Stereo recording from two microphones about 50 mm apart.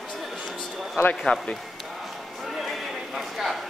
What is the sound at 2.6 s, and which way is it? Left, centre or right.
Horse, centre.